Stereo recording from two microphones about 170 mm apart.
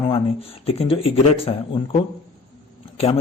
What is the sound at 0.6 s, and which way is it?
A man's voice, 35° left (ahead or behind).